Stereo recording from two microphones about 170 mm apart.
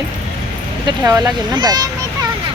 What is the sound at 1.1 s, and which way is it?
Speech, 25° right (ahead or behind).